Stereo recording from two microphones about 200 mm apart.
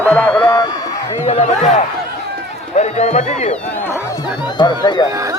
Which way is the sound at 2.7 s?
35° left (ahead or behind).